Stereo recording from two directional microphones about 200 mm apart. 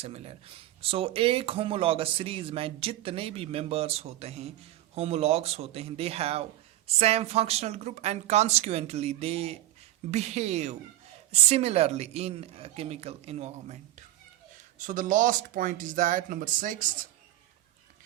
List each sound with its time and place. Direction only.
0.0 s speech: 30° right (ahead or behind)
14.8 s speech: 40° right (ahead or behind)